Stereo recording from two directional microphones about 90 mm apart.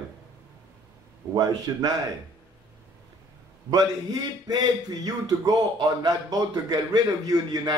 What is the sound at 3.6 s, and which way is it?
Speech, 50° right (ahead or behind).